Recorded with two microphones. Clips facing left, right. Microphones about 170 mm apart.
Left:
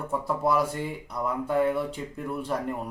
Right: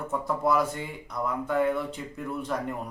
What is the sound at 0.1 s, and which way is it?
Speech, 10° left (ahead or behind).